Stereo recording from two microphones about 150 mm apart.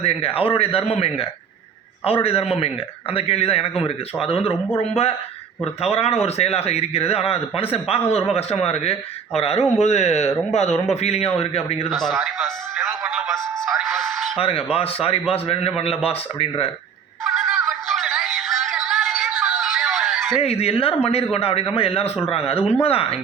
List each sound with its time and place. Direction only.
0.0 s a man's voice: 40° left (ahead or behind)
11.9 s a man's voice: centre (ahead or behind)
13.6 s a sound: centre (ahead or behind)
14.4 s a man's voice: 40° left (ahead or behind)
17.2 s synthetic singing: centre (ahead or behind)
17.7 s music: centre (ahead or behind)
18.2 s a sound: centre (ahead or behind)
20.4 s a man's voice: 40° left (ahead or behind)